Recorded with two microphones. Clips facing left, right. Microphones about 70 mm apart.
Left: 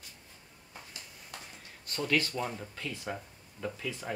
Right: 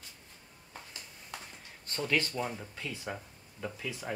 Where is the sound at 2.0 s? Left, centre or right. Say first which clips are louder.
Left 1 dB; right.